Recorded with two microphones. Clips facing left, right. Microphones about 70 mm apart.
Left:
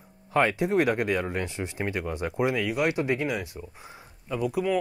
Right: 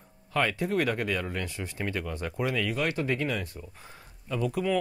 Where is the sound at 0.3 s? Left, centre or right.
Left.